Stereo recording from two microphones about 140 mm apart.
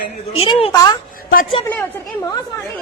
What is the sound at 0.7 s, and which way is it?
Speech, 25° left (ahead or behind).